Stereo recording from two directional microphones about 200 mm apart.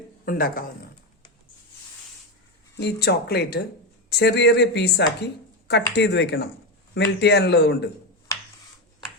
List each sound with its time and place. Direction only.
0.3 s speech: 45° left (ahead or behind)
2.7 s a woman's voice: 55° left (ahead or behind)